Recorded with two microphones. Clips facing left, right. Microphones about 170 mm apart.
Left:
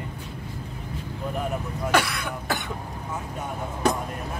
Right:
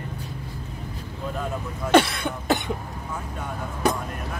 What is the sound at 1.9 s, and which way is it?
Cough, 25° right (ahead or behind).